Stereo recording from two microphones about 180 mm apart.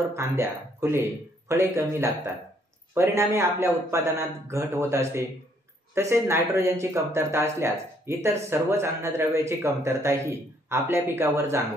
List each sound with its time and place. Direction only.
0.1 s speech: 15° right (ahead or behind)